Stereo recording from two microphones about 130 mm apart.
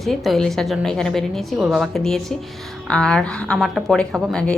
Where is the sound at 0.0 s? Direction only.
Centre (ahead or behind).